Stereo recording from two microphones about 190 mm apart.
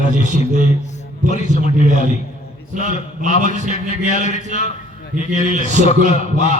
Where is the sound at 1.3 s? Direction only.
35° left (ahead or behind).